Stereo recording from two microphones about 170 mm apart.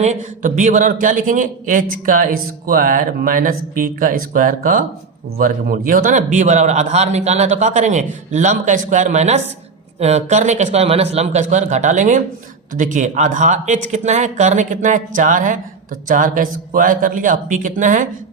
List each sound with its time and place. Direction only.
0.0 s a man's voice: 45° right (ahead or behind)